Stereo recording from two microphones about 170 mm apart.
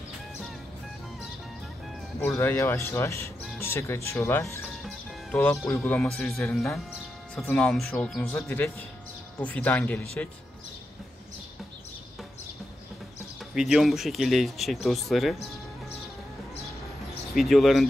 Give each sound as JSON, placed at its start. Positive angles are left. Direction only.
{"t": 2.1, "sound": "speech", "side_deg": 15}
{"t": 4.8, "sound": "music", "side_deg": 10}
{"t": 5.8, "sound": "speech", "side_deg": 5}
{"t": 13.6, "sound": "speech", "side_deg": 0}
{"t": 17.3, "sound": "speech", "side_deg": 0}